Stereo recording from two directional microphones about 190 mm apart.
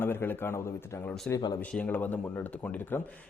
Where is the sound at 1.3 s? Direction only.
20° left (ahead or behind).